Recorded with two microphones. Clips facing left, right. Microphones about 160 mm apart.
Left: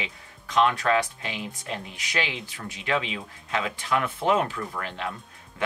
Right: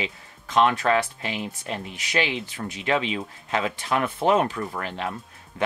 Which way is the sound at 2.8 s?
25° right (ahead or behind).